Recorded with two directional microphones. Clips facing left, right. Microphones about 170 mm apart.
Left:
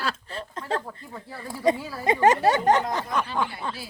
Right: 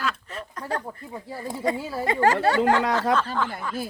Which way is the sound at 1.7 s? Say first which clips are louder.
Right 5 dB; 25° right (ahead or behind).